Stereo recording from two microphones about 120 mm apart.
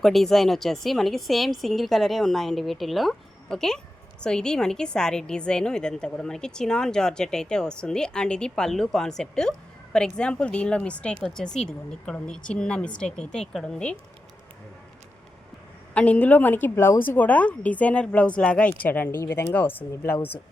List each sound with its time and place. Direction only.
0.0 s a woman's voice: centre (ahead or behind)
16.0 s a woman's voice: 10° left (ahead or behind)